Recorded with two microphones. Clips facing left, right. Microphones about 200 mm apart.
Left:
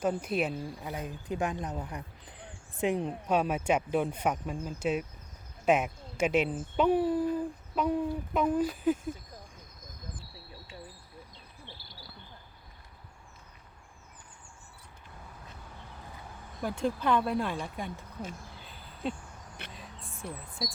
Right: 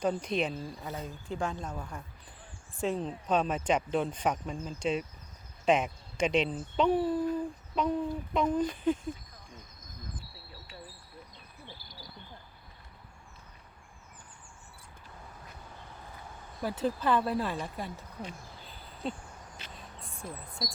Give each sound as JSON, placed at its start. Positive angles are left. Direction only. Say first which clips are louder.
{"t": 0.0, "sound": "speech", "louder": "even", "side_deg": 5}
{"t": 16.6, "sound": "speech", "louder": "even", "side_deg": -5}
{"t": 19.6, "sound": "music", "louder": "left 5 dB", "side_deg": 60}
{"t": 20.2, "sound": "speech", "louder": "left 2 dB", "side_deg": 65}